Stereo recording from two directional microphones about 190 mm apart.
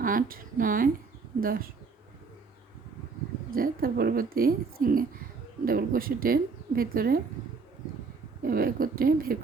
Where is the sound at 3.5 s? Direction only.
50° right (ahead or behind).